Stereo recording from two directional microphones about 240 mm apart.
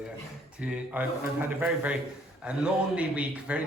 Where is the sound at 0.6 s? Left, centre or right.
Centre.